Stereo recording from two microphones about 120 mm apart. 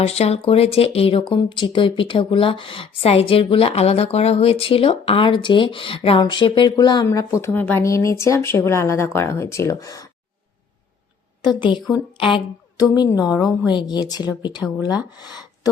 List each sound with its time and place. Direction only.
0.0 s speech: 60° left (ahead or behind); by 10.1 s 30° left (ahead or behind)
11.4 s speech: 40° left (ahead or behind)
13.2 s a woman's voice: 5° right (ahead or behind)
13.7 s speech: 35° left (ahead or behind)
15.2 s a sound: 35° left (ahead or behind)